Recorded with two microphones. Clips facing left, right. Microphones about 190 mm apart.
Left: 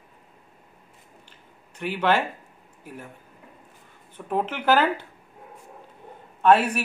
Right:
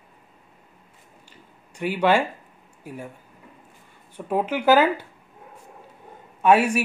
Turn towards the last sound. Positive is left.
turn(degrees=-10)  # may be behind; listen again after turning